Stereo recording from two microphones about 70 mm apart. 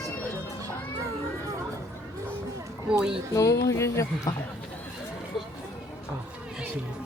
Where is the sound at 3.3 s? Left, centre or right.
Left.